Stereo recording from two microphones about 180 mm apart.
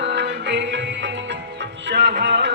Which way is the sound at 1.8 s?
70° right (ahead or behind).